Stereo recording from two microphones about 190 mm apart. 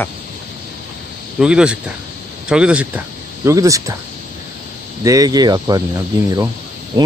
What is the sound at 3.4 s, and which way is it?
Speech, 15° right (ahead or behind).